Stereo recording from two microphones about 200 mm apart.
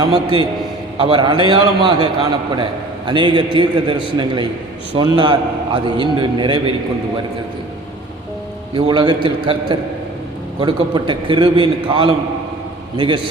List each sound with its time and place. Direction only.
0.0 s a man's voice: 20° right (ahead or behind)
8.7 s a man's voice: 25° right (ahead or behind)